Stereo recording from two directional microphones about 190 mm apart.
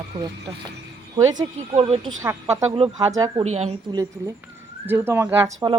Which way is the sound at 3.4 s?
35° right (ahead or behind).